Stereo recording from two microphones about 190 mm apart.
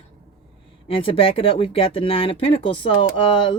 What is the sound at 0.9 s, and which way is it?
Speech, 30° left (ahead or behind).